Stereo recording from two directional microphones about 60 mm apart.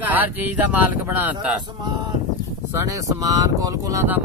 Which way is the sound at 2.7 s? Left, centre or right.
Right.